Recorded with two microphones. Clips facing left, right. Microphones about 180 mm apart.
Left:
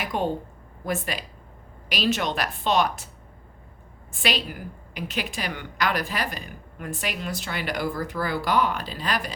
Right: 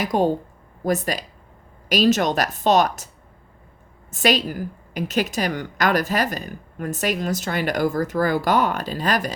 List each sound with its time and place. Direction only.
0.0 s speech: 40° right (ahead or behind)
4.1 s a woman's voice: 45° right (ahead or behind)